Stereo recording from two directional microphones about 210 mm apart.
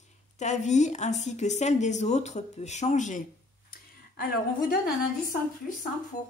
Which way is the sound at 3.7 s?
45° left (ahead or behind).